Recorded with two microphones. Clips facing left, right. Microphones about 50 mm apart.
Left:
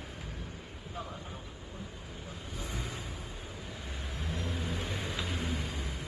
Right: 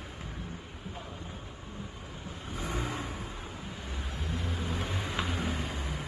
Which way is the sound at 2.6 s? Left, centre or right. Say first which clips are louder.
Right 7 dB; right.